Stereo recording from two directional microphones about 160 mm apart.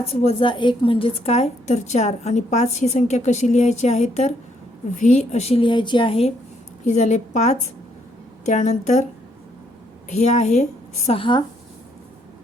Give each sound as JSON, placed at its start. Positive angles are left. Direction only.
{"t": 0.1, "sound": "a woman's voice", "side_deg": 40}
{"t": 6.8, "sound": "a woman's voice", "side_deg": 50}
{"t": 10.1, "sound": "a woman's voice", "side_deg": 45}
{"t": 11.2, "sound": "speech", "side_deg": 30}